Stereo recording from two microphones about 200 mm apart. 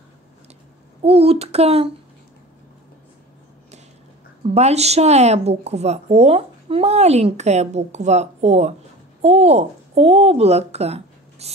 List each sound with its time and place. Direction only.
1.0 s speech: 30° right (ahead or behind)
4.5 s a woman's voice: 30° right (ahead or behind)